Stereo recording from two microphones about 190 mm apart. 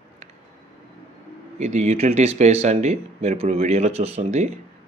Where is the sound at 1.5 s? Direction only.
35° right (ahead or behind).